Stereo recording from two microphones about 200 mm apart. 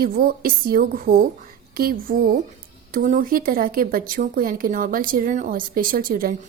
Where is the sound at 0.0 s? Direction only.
50° right (ahead or behind).